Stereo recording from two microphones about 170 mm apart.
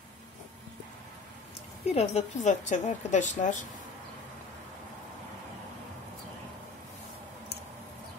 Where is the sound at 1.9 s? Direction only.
40° left (ahead or behind).